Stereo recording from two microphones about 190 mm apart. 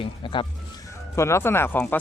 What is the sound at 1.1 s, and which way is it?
Speech, 15° left (ahead or behind).